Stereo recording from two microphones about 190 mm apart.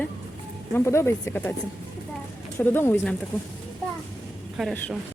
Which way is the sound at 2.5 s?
10° left (ahead or behind).